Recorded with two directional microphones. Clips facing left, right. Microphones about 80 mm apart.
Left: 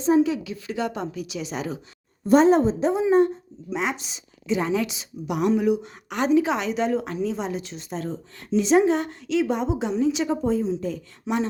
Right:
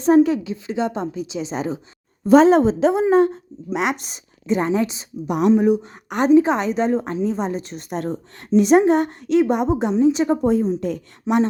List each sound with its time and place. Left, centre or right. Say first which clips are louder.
0.0 s a woman's voice: right 5 dB; right
0.4 s a woman's voice: right 5 dB; right
2.4 s a woman's voice: right 4 dB; right
3.9 s a woman's voice: right 2 dB; right
10.4 s a woman's voice: right 5 dB; right